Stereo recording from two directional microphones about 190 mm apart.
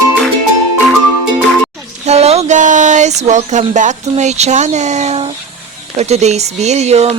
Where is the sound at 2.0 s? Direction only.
35° right (ahead or behind).